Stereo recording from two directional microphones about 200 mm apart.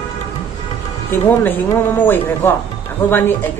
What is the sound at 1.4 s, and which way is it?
A man's voice, 10° left (ahead or behind).